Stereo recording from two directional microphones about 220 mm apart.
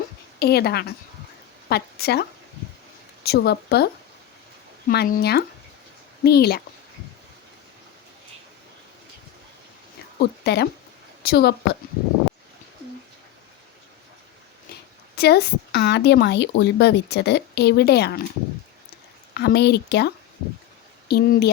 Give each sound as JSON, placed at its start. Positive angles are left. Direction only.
{"t": 0.3, "sound": "a woman's voice", "side_deg": 45}
{"t": 3.2, "sound": "a woman's voice", "side_deg": 45}
{"t": 4.9, "sound": "a woman's voice", "side_deg": 40}
{"t": 10.2, "sound": "a woman's voice", "side_deg": 50}
{"t": 15.1, "sound": "a woman's voice", "side_deg": 45}
{"t": 19.3, "sound": "a woman's voice", "side_deg": 50}